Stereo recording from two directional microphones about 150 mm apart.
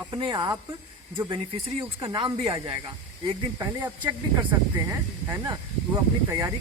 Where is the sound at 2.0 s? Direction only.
30° right (ahead or behind).